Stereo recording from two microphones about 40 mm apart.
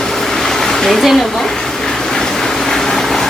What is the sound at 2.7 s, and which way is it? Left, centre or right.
Vehicle, centre.